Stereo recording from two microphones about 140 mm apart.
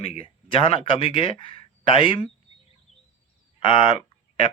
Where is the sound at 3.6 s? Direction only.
40° left (ahead or behind).